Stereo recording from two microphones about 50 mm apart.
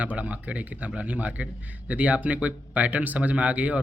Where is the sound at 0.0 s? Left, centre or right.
Right.